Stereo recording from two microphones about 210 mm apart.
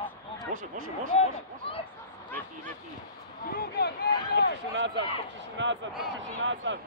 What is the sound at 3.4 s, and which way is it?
Speech, 45° left (ahead or behind).